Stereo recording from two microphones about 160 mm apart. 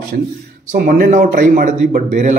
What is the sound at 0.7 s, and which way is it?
Speech, 55° right (ahead or behind).